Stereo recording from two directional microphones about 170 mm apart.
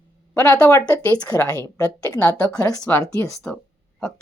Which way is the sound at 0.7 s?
20° left (ahead or behind).